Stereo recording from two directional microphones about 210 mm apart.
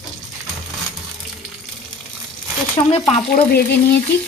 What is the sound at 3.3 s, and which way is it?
Speech, 50° left (ahead or behind).